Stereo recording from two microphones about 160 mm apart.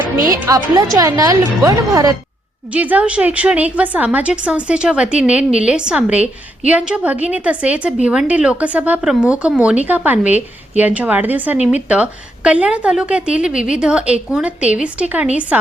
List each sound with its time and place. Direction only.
0.3 s a woman's voice: 20° right (ahead or behind)
2.7 s a woman's voice: 10° right (ahead or behind)